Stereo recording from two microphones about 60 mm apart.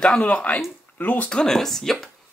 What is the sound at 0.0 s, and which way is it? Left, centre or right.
Speech, centre.